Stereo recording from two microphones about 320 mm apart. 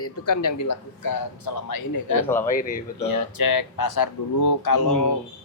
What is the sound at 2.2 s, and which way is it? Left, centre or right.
Speech, centre.